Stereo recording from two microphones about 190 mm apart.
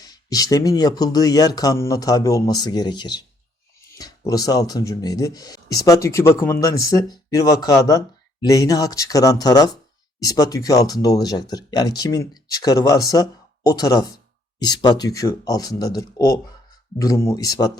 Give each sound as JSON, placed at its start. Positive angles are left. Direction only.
{"t": 0.0, "sound": "speech", "side_deg": 20}